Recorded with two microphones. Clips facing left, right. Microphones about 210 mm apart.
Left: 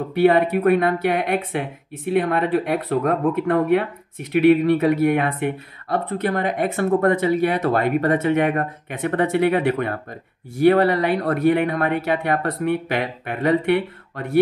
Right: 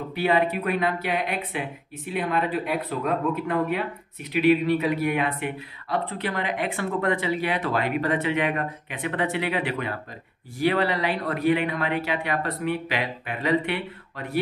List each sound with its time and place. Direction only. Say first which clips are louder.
0.1 s speech: left 7 dB; 55° left (ahead or behind)